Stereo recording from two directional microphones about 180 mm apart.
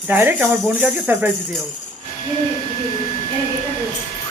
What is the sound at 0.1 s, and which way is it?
Speech, 10° right (ahead or behind).